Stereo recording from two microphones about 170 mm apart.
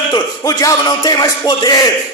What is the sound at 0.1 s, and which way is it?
A man's voice, 20° left (ahead or behind).